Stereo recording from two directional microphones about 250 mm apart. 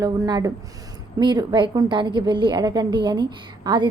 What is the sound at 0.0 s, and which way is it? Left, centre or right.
A woman's voice, centre.